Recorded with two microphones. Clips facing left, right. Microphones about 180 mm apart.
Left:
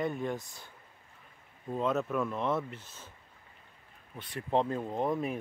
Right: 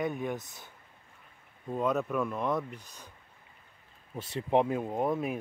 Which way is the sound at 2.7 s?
15° right (ahead or behind).